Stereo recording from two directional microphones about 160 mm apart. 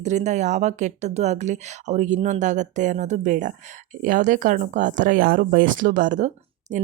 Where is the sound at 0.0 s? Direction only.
45° right (ahead or behind).